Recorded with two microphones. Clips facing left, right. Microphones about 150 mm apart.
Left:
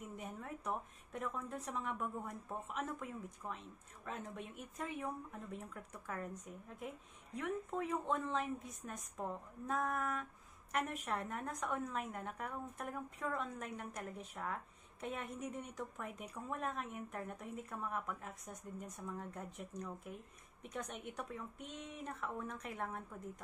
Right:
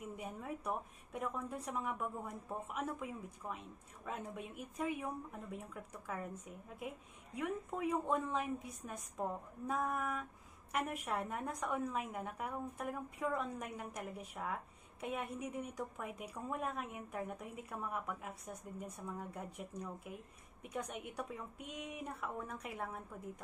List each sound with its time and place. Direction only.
0.1 s a woman's voice: 10° right (ahead or behind)
7.3 s a woman's voice: 10° right (ahead or behind)